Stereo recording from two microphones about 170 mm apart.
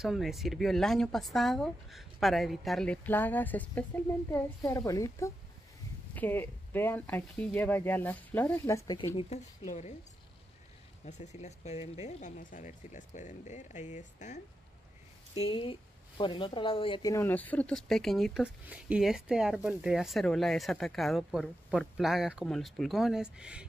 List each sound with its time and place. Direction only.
0.0 s speech: centre (ahead or behind); by 9.1 s 20° left (ahead or behind)
9.3 s speech: 40° left (ahead or behind)
11.1 s speech: 40° left (ahead or behind)
15.4 s speech: 30° left (ahead or behind)
17.1 s speech: 10° left (ahead or behind); by 23.6 s 5° right (ahead or behind)